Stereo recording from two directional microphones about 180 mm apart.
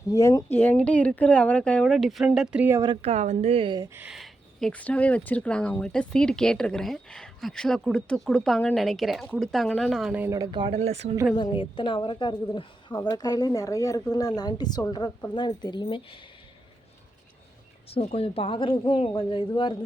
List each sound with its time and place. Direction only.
0.1 s speech: 20° left (ahead or behind); by 2.8 s 10° right (ahead or behind)
2.8 s speech: 30° right (ahead or behind)
11.3 s speech: 25° left (ahead or behind)
17.8 s speech: 35° left (ahead or behind)